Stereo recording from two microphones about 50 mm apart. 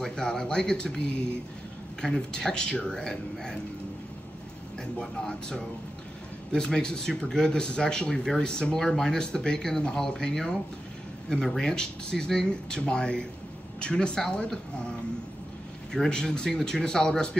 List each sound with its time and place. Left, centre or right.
0.0 s speech: centre
5.1 s speech: centre
15.9 s speech: centre